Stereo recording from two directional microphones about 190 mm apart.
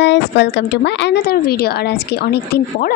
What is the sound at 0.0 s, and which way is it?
A woman's voice, 65° left (ahead or behind).